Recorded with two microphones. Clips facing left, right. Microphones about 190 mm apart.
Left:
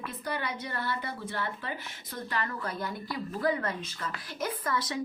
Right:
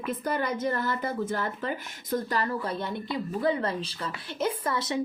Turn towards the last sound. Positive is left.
turn(degrees=-25)  # may be behind; listen again after turning